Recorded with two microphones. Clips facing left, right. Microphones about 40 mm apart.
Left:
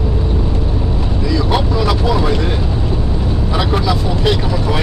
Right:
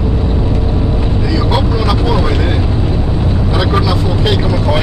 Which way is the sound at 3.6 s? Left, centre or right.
Centre.